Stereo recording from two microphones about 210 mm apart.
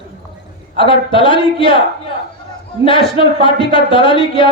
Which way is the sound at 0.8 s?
25° left (ahead or behind).